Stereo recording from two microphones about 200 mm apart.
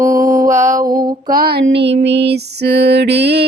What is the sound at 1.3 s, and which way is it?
Music, 50° right (ahead or behind).